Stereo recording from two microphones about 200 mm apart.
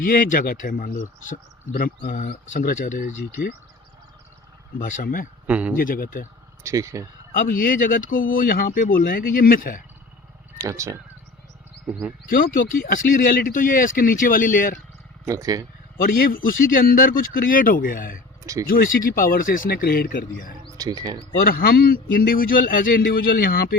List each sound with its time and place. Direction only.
0.0 s speech: 45° left (ahead or behind)
4.8 s speech: 40° left (ahead or behind)
5.5 s speech: 5° right (ahead or behind)
5.7 s speech: 45° left (ahead or behind)
6.6 s speech: 15° right (ahead or behind)
7.3 s speech: 40° left (ahead or behind)
10.6 s speech: 15° right (ahead or behind)
12.3 s speech: 45° left (ahead or behind)
15.3 s speech: 15° right (ahead or behind)
16.0 s speech: 45° left (ahead or behind)
20.7 s speech: 20° right (ahead or behind)
21.4 s speech: 50° left (ahead or behind)